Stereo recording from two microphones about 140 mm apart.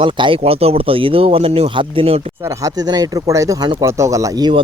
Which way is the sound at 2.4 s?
20° right (ahead or behind).